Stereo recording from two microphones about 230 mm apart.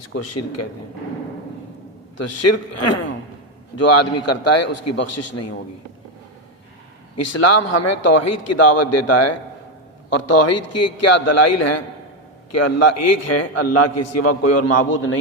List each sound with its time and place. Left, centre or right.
0.2 s a man's voice: left
2.1 s a man's voice: left
7.3 s a man's voice: left
14.8 s a man's voice: left